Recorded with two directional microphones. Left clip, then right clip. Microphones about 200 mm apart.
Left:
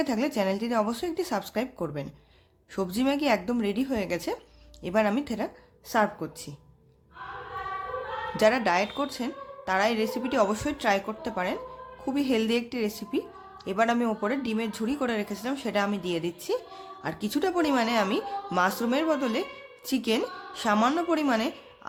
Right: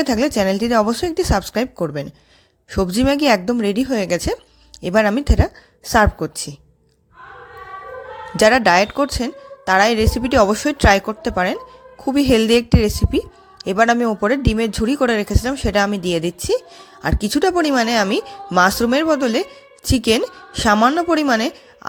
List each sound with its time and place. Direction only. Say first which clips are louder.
0.0 s a woman's voice: right 10 dB; 35° right (ahead or behind)
8.4 s a woman's voice: right 11 dB; 40° right (ahead or behind)